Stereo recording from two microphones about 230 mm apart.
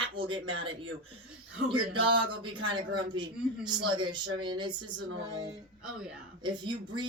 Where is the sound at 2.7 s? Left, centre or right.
Centre.